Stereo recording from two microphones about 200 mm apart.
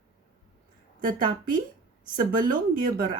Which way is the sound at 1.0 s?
45° right (ahead or behind).